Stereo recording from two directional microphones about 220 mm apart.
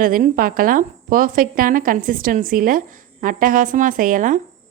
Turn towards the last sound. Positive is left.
turn(degrees=-35)  # may be behind; listen again after turning